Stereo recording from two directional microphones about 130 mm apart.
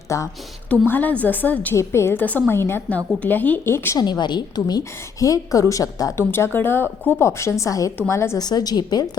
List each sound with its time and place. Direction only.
0.1 s a woman's voice: 25° left (ahead or behind)
0.7 s a woman's voice: 15° left (ahead or behind)
3.9 s a woman's voice: 30° left (ahead or behind)